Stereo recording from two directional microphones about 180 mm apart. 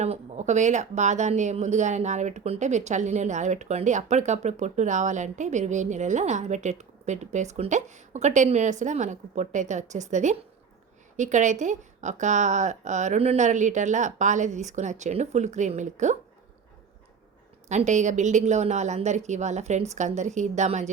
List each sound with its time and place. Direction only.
0.0 s speech: 40° right (ahead or behind)
17.7 s speech: 40° right (ahead or behind)